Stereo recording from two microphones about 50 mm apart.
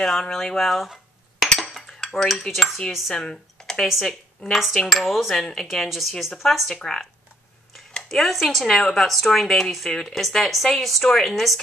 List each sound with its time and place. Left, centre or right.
0.0 s speech: centre
1.4 s cutlery: centre
2.9 s speech: centre
3.2 s a sound: centre
4.1 s speech: centre
6.7 s speech: centre
8.1 s speech: centre